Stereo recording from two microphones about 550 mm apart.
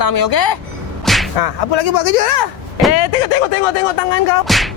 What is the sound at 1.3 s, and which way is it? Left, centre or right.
Music, left.